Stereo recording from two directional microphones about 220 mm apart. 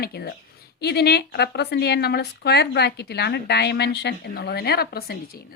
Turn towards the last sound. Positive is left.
turn(degrees=45)  # may be behind; listen again after turning